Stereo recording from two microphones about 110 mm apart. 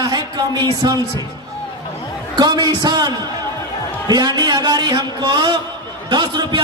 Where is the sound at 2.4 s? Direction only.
40° right (ahead or behind).